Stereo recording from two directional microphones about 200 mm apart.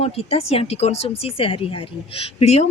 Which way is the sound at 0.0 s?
30° left (ahead or behind).